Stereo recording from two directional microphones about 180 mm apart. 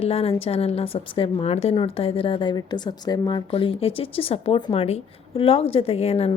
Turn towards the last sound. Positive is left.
turn(degrees=35)  # may be behind; listen again after turning